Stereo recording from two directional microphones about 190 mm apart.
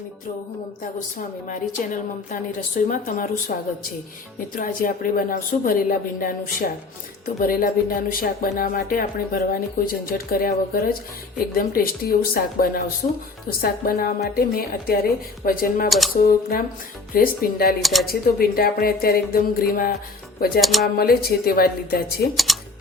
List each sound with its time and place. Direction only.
1.5 s a woman's voice: 45° left (ahead or behind)
4.5 s a woman's voice: 45° left (ahead or behind)
15.9 s speech: centre (ahead or behind)
16.1 s a woman's voice: 50° left (ahead or behind)
17.7 s speech: centre (ahead or behind)
18.0 s a woman's voice: 50° left (ahead or behind)
20.6 s speech: centre (ahead or behind)
21.0 s a woman's voice: 55° left (ahead or behind)
22.5 s typing: centre (ahead or behind)